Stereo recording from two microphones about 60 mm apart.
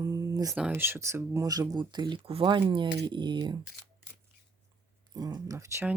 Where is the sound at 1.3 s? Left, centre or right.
Right.